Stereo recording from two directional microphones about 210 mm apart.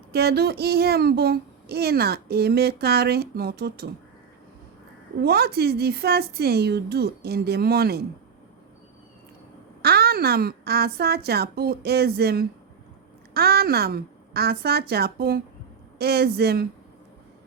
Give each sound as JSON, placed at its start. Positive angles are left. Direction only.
{"t": 0.1, "sound": "speech", "side_deg": -50}
{"t": 5.2, "sound": "speech", "side_deg": -50}
{"t": 9.8, "sound": "speech", "side_deg": -50}